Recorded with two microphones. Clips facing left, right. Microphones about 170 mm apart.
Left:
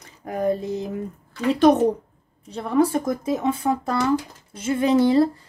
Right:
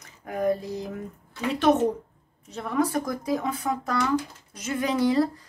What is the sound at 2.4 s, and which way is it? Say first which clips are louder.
Speech: left 6 dB; 30° left (ahead or behind).